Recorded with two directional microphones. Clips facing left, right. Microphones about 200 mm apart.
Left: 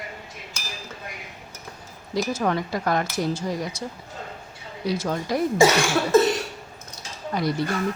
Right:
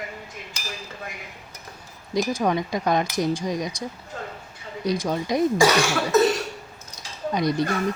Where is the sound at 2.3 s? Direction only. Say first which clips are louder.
Even; 15° right (ahead or behind).